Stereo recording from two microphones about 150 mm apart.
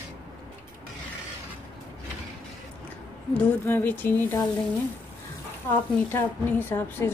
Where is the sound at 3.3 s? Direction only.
15° left (ahead or behind).